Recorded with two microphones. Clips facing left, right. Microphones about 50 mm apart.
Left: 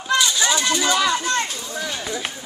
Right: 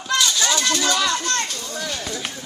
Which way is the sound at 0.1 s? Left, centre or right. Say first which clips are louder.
Left 1 dB; centre.